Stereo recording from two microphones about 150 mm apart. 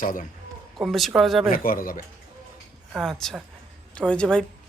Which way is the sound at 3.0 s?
Centre (ahead or behind).